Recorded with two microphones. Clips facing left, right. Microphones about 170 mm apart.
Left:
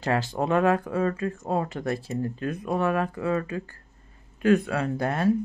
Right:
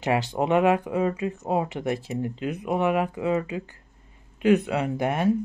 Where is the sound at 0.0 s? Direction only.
20° right (ahead or behind).